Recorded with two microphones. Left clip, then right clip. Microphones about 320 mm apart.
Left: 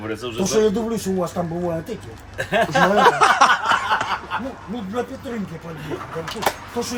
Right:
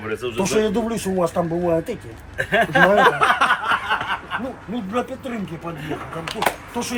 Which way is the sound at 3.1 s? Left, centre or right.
Centre.